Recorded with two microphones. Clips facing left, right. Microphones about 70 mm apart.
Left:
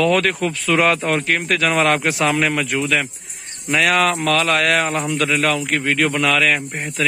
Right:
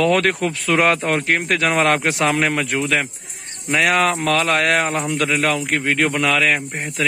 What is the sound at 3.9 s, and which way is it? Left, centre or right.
A man's voice, right.